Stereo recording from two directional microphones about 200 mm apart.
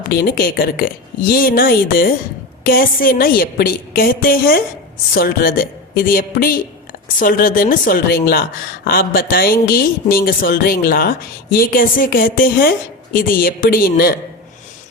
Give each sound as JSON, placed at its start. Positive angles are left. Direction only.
{"t": 0.1, "sound": "speech", "side_deg": 50}